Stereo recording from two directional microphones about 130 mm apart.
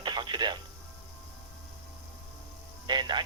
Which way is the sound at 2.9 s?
35° right (ahead or behind).